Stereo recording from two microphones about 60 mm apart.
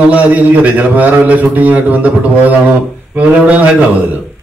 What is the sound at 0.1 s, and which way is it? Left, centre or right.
A man's voice, right.